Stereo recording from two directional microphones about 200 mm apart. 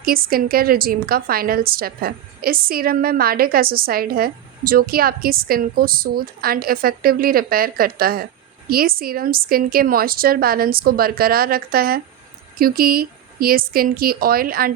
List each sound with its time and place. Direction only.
0.0 s a woman's voice: 45° right (ahead or behind)